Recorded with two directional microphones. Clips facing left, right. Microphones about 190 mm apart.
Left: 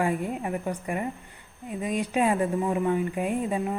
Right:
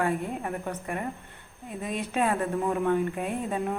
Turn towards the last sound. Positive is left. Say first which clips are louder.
# left 2 dB
turn(degrees=10)  # may be behind; listen again after turning